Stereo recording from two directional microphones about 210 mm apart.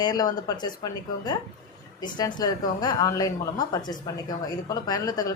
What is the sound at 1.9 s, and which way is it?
A woman's voice, 20° left (ahead or behind).